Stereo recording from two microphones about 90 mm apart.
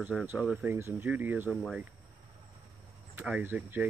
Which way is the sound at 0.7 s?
25° right (ahead or behind).